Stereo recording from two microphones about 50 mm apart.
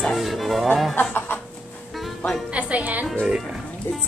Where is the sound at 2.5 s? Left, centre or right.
Right.